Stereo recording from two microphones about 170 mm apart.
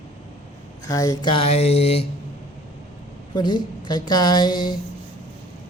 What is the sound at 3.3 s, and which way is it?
A woman's voice, 25° left (ahead or behind).